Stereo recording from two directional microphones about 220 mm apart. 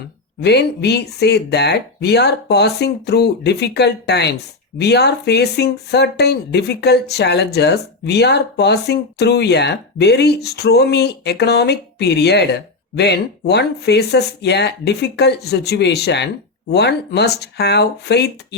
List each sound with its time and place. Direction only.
0.4 s speech: 50° left (ahead or behind)